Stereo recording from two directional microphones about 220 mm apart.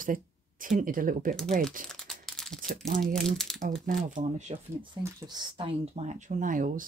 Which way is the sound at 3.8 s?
35° right (ahead or behind).